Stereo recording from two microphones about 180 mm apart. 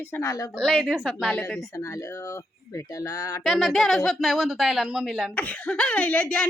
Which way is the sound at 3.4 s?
Centre (ahead or behind).